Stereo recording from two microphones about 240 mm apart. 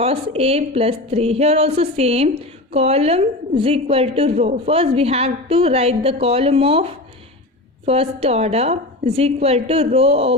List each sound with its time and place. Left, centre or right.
0.0 s a woman's voice: right